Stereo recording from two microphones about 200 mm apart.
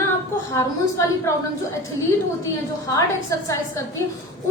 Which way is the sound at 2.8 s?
15° left (ahead or behind).